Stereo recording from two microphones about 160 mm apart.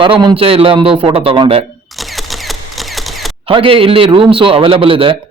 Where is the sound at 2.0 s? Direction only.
Centre (ahead or behind).